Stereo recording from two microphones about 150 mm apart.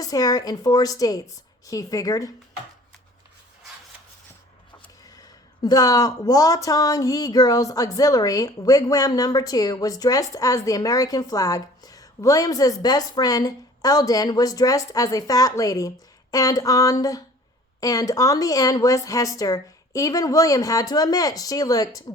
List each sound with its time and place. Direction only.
0.0 s a woman's voice: 25° left (ahead or behind)
5.0 s a woman's voice: 25° left (ahead or behind)